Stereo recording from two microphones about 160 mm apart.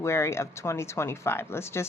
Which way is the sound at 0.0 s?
15° left (ahead or behind).